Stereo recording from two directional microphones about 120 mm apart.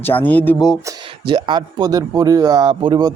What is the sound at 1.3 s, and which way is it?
Speech, 40° right (ahead or behind).